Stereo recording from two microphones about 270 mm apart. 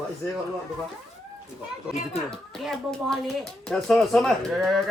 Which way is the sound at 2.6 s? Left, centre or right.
Centre.